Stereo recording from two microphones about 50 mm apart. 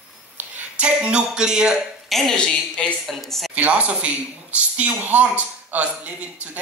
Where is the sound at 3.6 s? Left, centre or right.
Right.